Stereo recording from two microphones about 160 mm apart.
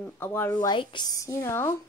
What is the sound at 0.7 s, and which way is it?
Speech, 30° left (ahead or behind).